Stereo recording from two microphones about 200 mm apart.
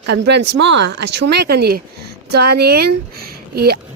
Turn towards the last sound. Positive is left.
turn(degrees=-50)  # may be behind; listen again after turning